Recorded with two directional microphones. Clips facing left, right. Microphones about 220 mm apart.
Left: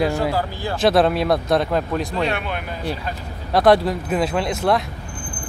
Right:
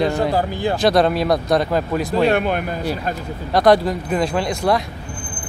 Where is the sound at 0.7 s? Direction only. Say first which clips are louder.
Even; centre (ahead or behind).